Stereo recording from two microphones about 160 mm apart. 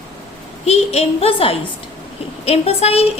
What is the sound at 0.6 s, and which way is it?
A woman's voice, 40° left (ahead or behind).